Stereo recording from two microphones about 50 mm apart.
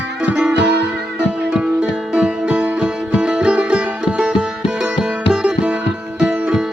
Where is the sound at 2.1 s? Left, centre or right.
Right.